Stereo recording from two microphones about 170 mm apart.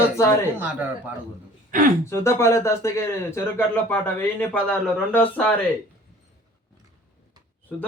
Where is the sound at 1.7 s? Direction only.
55° right (ahead or behind).